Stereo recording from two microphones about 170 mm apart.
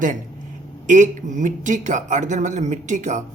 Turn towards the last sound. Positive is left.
turn(degrees=-45)  # may be behind; listen again after turning